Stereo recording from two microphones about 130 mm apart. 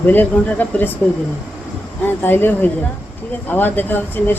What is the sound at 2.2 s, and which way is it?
Speech, 15° left (ahead or behind).